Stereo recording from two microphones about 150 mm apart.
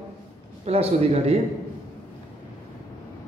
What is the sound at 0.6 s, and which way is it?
Speech, 40° right (ahead or behind).